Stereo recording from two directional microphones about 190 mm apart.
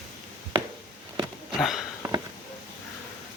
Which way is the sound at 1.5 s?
Centre (ahead or behind).